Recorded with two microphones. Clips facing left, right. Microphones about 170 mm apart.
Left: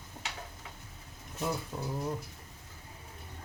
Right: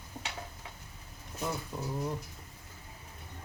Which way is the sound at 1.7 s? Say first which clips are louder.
Even; 5° left (ahead or behind).